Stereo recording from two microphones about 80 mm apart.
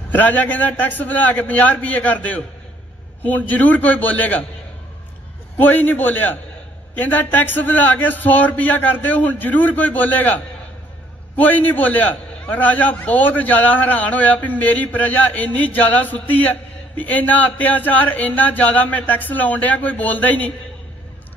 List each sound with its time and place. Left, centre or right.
0.1 s a man's voice: left
5.6 s a man's voice: left